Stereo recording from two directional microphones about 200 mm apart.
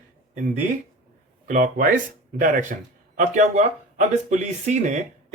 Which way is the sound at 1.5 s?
40° right (ahead or behind).